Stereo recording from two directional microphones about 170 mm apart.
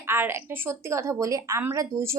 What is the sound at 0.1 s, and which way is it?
A woman's voice, 15° right (ahead or behind).